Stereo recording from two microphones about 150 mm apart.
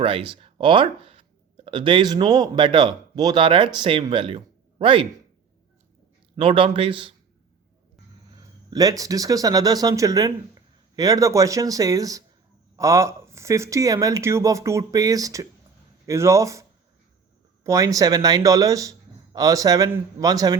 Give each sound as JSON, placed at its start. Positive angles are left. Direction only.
{"t": 0.0, "sound": "speech", "side_deg": -35}
{"t": 6.3, "sound": "speech", "side_deg": -35}
{"t": 8.7, "sound": "speech", "side_deg": -25}